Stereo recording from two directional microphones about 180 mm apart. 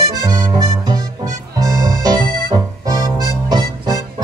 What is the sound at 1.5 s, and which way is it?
Music, 20° right (ahead or behind).